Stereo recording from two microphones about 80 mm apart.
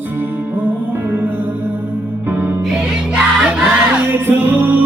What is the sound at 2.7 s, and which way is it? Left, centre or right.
Music, centre.